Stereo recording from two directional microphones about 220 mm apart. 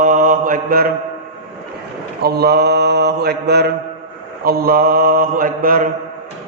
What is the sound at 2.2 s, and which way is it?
Mantra, 45° right (ahead or behind).